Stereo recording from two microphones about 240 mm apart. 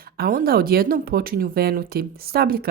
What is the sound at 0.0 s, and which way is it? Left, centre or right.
Speech, right.